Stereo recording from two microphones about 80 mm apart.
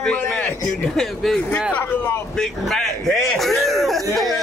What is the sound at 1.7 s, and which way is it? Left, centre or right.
Speech, left.